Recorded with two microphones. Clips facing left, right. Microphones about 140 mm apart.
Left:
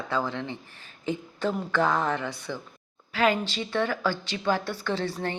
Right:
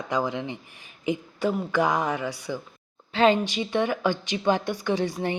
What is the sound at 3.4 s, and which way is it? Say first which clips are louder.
A woman's voice: right 3 dB; 15° right (ahead or behind).